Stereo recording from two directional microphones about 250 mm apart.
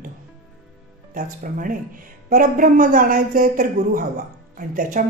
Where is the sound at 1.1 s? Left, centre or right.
Right.